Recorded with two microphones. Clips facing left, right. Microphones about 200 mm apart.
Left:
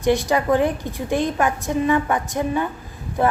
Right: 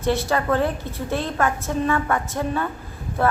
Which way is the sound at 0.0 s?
15° left (ahead or behind).